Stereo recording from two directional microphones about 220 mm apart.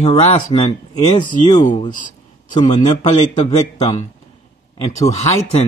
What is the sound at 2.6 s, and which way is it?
Speech, 30° left (ahead or behind).